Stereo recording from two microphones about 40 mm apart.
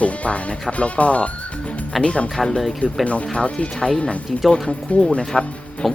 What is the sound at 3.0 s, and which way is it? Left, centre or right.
Speech, left.